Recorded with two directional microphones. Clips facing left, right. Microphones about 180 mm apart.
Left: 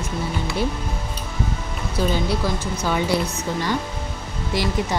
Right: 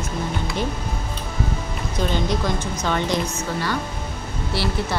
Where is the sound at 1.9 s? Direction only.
10° left (ahead or behind).